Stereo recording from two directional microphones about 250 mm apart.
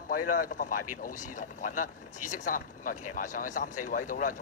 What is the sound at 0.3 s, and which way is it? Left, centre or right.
Speech, left.